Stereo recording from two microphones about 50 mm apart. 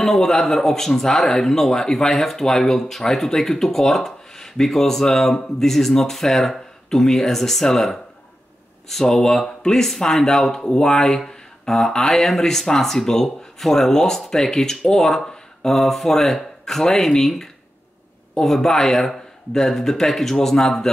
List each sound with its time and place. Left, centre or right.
0.0 s speech: centre